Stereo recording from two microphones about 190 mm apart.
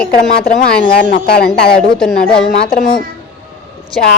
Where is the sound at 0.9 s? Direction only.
55° left (ahead or behind).